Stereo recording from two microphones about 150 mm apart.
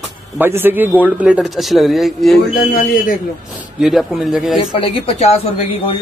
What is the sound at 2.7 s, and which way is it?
Speech, 70° left (ahead or behind).